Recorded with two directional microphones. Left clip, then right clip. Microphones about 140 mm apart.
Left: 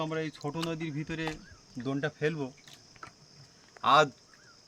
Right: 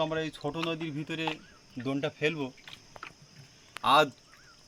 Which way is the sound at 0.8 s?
45° left (ahead or behind).